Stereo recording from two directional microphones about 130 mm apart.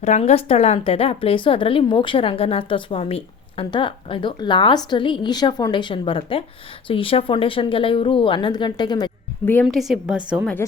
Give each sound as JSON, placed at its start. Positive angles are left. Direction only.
{"t": 0.0, "sound": "a woman's voice", "side_deg": 60}
{"t": 9.6, "sound": "a woman's voice", "side_deg": 0}